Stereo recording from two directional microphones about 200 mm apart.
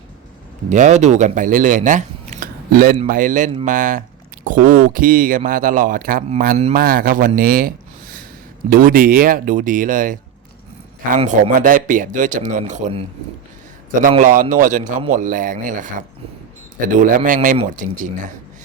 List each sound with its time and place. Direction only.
0.7 s speech: 35° right (ahead or behind)
8.7 s speech: 45° right (ahead or behind)
14.1 s speech: 40° right (ahead or behind)